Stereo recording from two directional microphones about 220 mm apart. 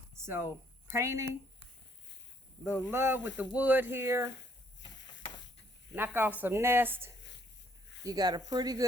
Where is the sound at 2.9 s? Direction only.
10° right (ahead or behind).